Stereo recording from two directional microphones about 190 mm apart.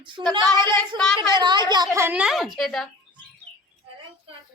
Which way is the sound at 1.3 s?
25° right (ahead or behind).